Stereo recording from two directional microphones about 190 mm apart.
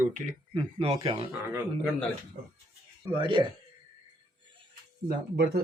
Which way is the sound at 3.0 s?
25° right (ahead or behind).